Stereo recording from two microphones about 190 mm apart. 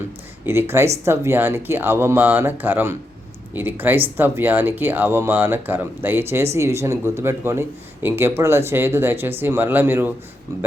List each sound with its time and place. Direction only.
0.4 s speech: 10° right (ahead or behind)